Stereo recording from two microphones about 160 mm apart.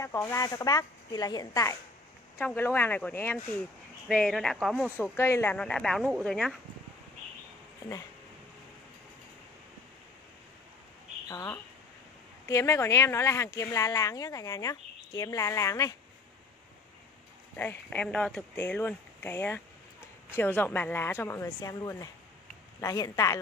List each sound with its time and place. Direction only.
0.0 s speech: 20° left (ahead or behind); by 4.8 s centre (ahead or behind)
5.1 s speech: 15° left (ahead or behind)
11.2 s speech: 20° left (ahead or behind)
17.6 s speech: 10° left (ahead or behind)